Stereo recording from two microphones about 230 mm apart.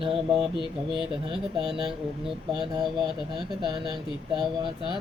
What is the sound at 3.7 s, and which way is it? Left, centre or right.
Speech, centre.